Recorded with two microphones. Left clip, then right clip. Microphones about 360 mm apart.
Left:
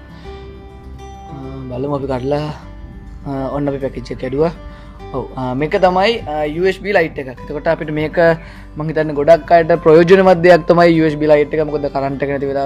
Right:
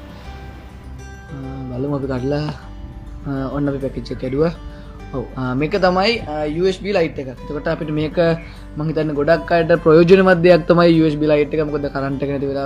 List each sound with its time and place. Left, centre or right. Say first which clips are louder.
1.9 s speech: left 4 dB; centre